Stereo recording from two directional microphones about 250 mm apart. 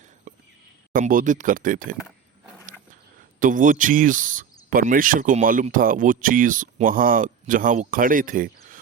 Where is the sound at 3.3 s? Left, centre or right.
Right.